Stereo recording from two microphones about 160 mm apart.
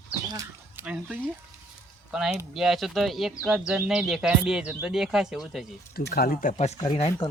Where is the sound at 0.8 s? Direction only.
5° right (ahead or behind).